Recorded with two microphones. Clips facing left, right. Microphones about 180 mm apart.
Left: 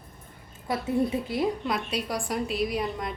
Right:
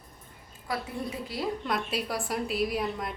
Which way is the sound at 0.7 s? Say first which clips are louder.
Left 3 dB; 25° left (ahead or behind).